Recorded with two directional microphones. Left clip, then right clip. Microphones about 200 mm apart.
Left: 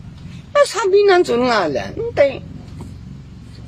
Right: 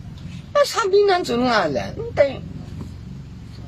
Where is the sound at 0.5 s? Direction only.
35° left (ahead or behind).